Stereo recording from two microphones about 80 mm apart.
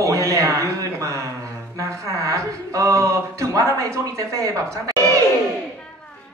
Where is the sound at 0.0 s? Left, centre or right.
Right.